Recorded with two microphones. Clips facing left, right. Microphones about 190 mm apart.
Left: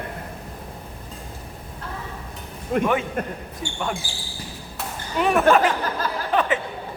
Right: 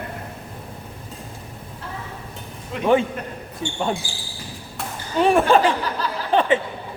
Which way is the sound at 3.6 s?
25° right (ahead or behind).